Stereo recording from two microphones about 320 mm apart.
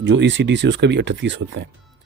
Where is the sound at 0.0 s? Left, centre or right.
Right.